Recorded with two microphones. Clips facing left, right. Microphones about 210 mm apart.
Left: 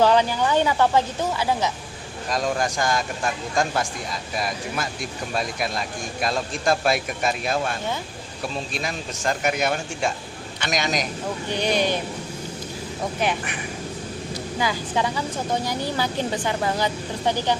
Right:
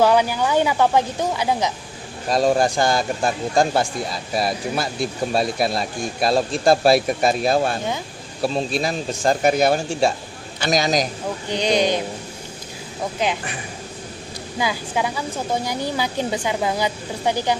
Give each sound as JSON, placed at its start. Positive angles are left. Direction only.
{"t": 0.0, "sound": "speech", "side_deg": -10}
{"t": 2.3, "sound": "speech", "side_deg": -30}
{"t": 11.4, "sound": "speech", "side_deg": -15}
{"t": 14.6, "sound": "speech", "side_deg": -10}